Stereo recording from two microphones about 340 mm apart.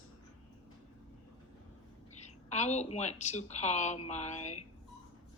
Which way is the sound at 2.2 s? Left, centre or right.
Centre.